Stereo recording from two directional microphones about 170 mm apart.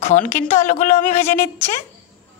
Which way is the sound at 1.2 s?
15° left (ahead or behind).